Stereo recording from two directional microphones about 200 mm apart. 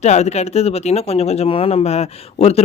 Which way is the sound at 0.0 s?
35° left (ahead or behind).